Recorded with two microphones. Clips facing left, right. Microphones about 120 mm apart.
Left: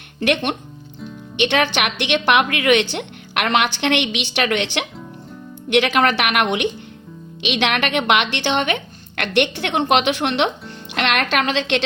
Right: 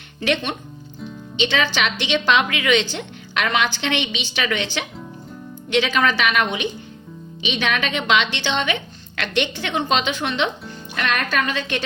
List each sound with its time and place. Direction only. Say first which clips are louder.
0.2 s a woman's voice: left 3 dB; 60° left (ahead or behind); by 11.9 s 85° left